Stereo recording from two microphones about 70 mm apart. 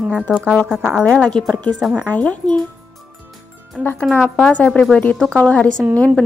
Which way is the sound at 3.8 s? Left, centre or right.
Left.